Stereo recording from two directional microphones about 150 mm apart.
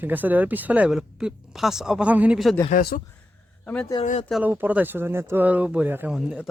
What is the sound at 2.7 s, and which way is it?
Speech, 70° left (ahead or behind).